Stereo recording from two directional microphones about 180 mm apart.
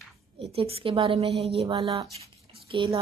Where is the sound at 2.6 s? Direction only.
30° right (ahead or behind).